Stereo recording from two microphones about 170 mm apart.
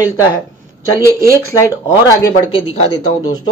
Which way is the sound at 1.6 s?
15° left (ahead or behind).